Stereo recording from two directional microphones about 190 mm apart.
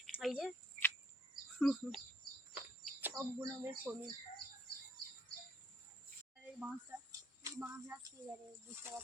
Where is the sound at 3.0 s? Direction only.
15° right (ahead or behind).